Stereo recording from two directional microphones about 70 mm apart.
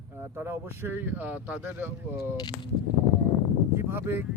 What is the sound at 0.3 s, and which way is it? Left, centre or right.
Speech, right.